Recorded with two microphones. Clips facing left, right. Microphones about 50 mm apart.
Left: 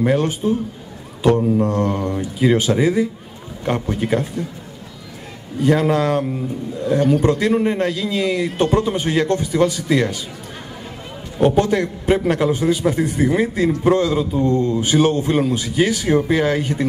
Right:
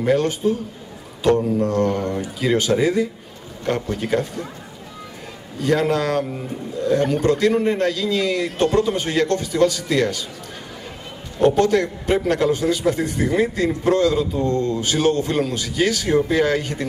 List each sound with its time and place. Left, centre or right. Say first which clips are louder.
0.0 s a man's voice: even; centre
1.6 s a man's voice: left 1 dB; centre
5.6 s a man's voice: left 3 dB; centre
11.3 s a man's voice: even; centre